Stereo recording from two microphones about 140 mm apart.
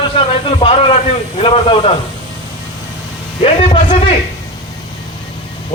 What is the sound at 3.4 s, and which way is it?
Speech, 45° left (ahead or behind).